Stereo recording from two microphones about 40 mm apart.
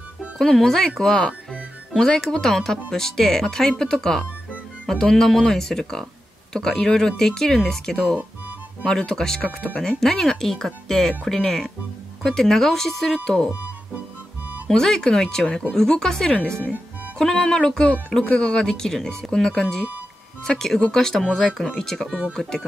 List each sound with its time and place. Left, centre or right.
0.4 s speech: centre
14.7 s speech: centre
17.4 s speech: left